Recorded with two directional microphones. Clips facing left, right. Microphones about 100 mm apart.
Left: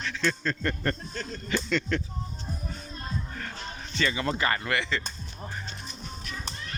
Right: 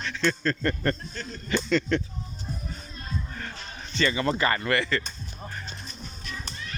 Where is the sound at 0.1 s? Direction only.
Centre (ahead or behind).